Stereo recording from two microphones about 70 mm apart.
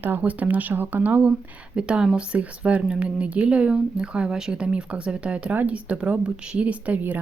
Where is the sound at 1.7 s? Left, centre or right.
Centre.